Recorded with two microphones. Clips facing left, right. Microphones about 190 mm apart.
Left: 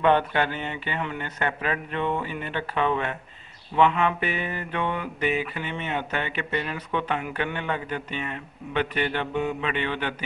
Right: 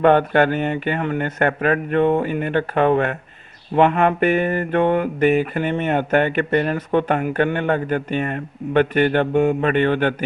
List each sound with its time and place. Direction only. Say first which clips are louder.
0.0 s mantra: right 7 dB; 50° right (ahead or behind)